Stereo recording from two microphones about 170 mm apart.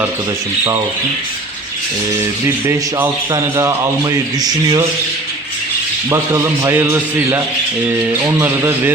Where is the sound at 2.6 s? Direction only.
15° right (ahead or behind).